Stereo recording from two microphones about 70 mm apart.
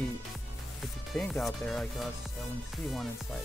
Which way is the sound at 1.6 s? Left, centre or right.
Centre.